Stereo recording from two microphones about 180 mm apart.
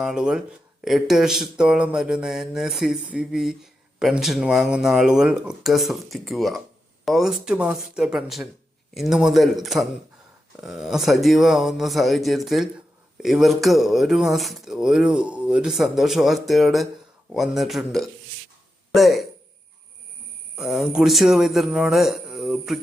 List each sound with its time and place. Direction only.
0.0 s a man's voice: 5° right (ahead or behind)
20.6 s a man's voice: 5° right (ahead or behind)